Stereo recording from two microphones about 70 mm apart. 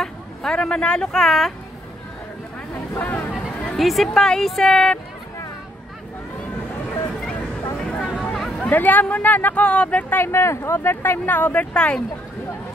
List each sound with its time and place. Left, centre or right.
0.0 s speech: centre
3.0 s speech: left
3.6 s speech: centre
7.8 s a sound: centre
8.6 s speech: left
10.1 s speech: left; by 12.0 s centre